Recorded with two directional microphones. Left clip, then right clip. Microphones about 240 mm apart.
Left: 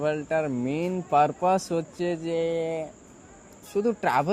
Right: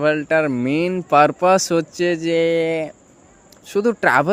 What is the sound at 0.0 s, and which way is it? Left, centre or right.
Speech, right.